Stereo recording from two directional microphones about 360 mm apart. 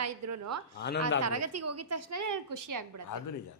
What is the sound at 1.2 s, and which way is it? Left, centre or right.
Speech, right.